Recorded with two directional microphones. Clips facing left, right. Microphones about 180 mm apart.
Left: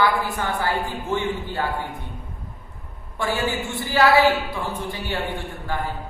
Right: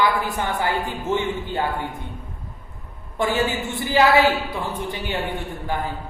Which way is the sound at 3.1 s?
20° right (ahead or behind).